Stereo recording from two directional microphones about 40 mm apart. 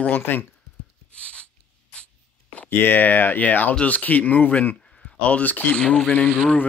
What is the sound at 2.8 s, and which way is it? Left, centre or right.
Speech, left.